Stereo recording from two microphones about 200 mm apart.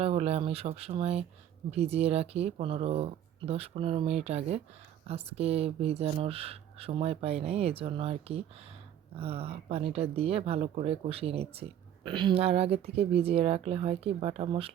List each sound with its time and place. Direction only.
0.0 s speech: 30° right (ahead or behind)